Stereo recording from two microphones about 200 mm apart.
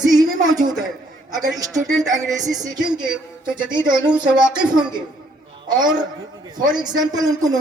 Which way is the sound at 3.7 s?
20° right (ahead or behind).